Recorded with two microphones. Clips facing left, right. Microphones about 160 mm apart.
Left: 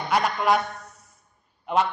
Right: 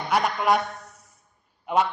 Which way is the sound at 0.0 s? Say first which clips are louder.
Even; centre (ahead or behind).